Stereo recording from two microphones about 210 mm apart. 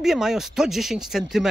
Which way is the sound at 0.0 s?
Centre (ahead or behind).